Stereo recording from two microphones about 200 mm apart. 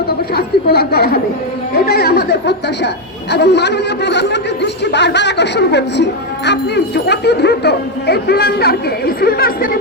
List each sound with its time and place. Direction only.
0.3 s a woman's voice: 50° left (ahead or behind)